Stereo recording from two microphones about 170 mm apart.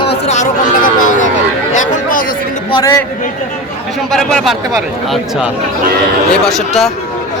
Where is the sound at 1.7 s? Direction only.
50° left (ahead or behind).